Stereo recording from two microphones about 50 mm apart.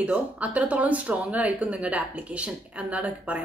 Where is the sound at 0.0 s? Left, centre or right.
Right.